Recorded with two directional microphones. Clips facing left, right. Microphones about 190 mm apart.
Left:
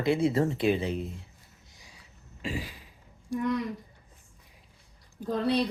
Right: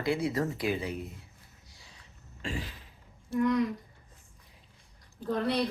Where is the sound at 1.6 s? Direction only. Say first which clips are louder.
Left 2 dB; 15° left (ahead or behind).